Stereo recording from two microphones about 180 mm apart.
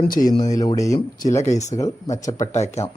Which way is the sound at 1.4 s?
40° left (ahead or behind).